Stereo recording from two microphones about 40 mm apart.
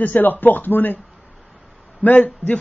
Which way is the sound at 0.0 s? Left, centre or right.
Left.